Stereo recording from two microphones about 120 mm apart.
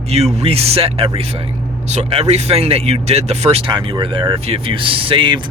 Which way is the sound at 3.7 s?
40° right (ahead or behind).